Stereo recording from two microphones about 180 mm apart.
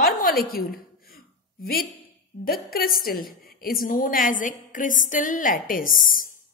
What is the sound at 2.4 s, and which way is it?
Speech, 55° left (ahead or behind).